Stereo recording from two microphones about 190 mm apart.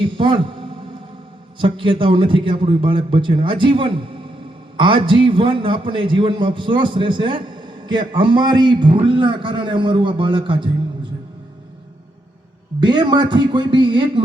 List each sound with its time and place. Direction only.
0.0 s a man's voice: 25° right (ahead or behind)
12.8 s a man's voice: 25° right (ahead or behind)